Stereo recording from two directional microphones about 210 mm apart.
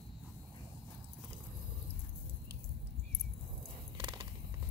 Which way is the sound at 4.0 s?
20° right (ahead or behind).